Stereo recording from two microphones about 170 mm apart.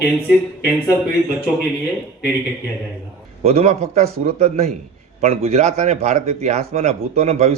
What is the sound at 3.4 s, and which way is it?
Speech, 40° right (ahead or behind).